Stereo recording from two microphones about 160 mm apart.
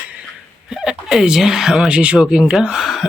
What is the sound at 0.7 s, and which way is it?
Speech, 5° right (ahead or behind).